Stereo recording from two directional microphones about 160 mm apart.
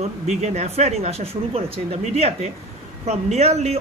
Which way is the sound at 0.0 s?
45° right (ahead or behind).